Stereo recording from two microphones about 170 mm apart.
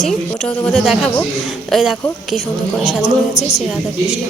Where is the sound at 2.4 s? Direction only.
40° left (ahead or behind).